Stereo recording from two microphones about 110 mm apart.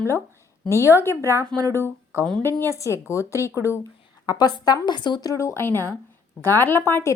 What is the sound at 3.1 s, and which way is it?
A woman's voice, 25° left (ahead or behind).